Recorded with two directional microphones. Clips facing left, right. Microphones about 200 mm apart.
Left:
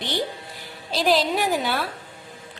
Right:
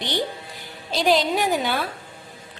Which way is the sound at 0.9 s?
Centre (ahead or behind).